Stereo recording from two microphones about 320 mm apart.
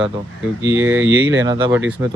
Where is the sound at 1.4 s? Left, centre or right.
Centre.